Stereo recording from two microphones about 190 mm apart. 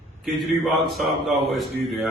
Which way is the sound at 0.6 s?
Centre (ahead or behind).